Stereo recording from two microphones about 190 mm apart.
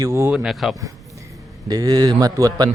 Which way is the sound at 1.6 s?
20° right (ahead or behind).